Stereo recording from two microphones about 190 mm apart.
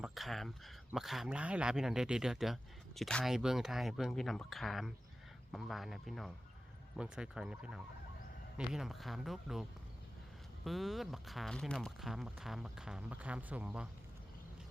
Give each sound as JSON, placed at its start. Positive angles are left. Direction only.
{"t": 0.0, "sound": "speech", "side_deg": 0}